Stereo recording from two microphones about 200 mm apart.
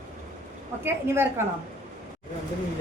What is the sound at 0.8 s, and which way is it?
Speech, 10° right (ahead or behind).